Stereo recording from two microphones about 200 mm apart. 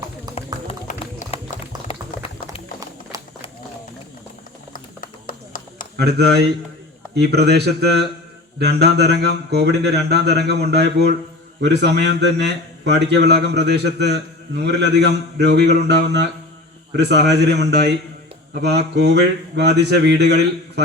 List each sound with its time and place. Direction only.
0.3 s clip-clop: 30° left (ahead or behind)
3.1 s run: 15° right (ahead or behind)
4.7 s a sound: 45° left (ahead or behind)
6.0 s a man's voice: 55° right (ahead or behind)